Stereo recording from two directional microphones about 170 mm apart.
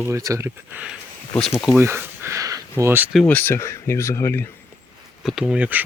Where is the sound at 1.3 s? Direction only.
10° left (ahead or behind).